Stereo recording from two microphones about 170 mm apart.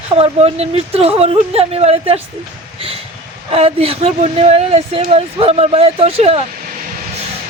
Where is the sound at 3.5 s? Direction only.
35° right (ahead or behind).